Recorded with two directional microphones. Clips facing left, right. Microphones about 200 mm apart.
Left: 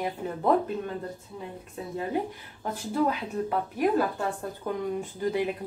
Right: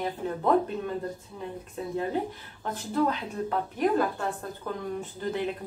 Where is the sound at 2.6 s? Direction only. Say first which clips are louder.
Even; 10° left (ahead or behind).